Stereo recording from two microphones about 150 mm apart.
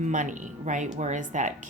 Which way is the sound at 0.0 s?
55° right (ahead or behind).